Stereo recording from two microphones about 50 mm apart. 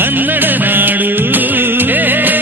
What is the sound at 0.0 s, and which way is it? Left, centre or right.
Music, right.